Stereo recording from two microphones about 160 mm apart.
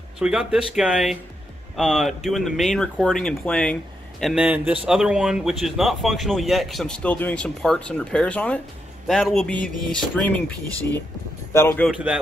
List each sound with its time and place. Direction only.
0.2 s a man's voice: 5° right (ahead or behind)
4.2 s a man's voice: 5° right (ahead or behind); by 11.9 s 15° left (ahead or behind)
11.9 s speech: 5° right (ahead or behind)